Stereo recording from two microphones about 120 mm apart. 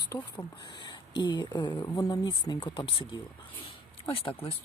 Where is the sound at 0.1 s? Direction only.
25° left (ahead or behind).